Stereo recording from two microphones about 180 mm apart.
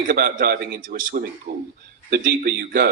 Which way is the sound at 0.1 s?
55° right (ahead or behind).